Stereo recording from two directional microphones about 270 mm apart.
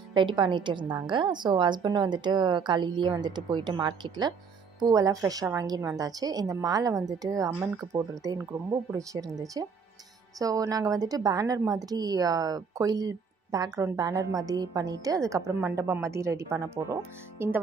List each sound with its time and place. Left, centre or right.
0.1 s a woman's voice: centre